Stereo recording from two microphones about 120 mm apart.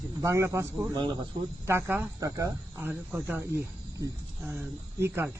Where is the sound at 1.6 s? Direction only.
20° right (ahead or behind).